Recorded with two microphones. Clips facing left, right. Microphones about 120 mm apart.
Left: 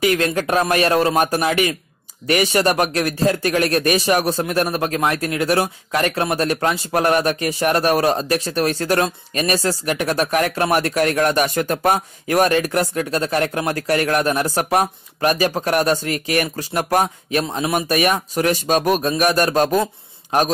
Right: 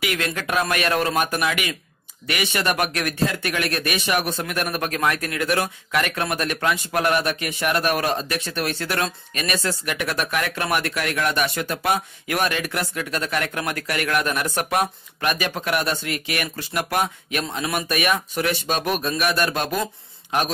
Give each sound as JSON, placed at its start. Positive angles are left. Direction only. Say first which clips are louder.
{"t": 0.0, "sound": "speech", "louder": "left 8 dB", "side_deg": 35}